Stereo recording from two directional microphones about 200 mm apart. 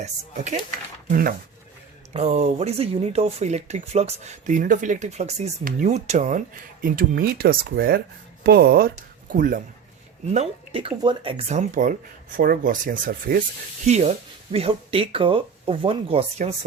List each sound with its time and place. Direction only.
0.0 s speech: 35° right (ahead or behind)
2.1 s speech: 35° right (ahead or behind)
10.3 s speech: 30° right (ahead or behind); by 13.4 s 45° right (ahead or behind)
13.8 s speech: 35° right (ahead or behind)